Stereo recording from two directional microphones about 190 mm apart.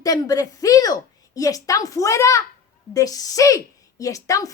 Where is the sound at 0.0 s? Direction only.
20° left (ahead or behind).